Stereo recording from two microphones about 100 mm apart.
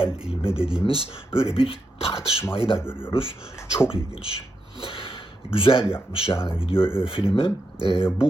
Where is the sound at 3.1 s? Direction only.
65° left (ahead or behind).